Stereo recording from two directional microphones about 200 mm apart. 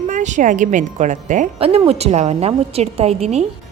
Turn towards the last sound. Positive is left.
turn(degrees=-35)  # may be behind; listen again after turning